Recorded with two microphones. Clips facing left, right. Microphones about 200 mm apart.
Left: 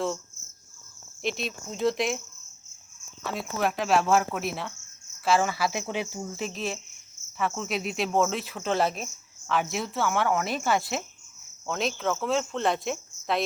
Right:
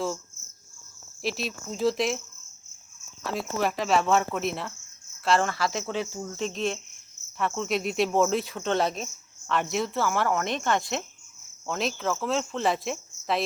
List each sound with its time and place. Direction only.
1.2 s speech: centre (ahead or behind)
3.2 s speech: centre (ahead or behind)